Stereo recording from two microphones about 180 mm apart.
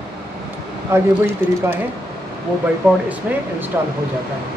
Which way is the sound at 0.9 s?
15° right (ahead or behind).